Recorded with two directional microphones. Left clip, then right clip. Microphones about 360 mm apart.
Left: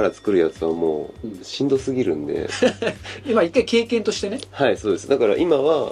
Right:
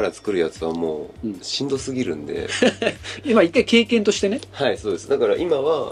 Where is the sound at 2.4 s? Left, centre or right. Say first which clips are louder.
Right 2 dB; right.